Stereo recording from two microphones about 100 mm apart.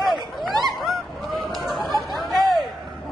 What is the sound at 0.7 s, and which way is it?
Goose, centre (ahead or behind).